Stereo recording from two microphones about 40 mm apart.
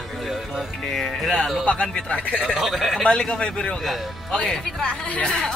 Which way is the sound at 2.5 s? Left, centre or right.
Centre.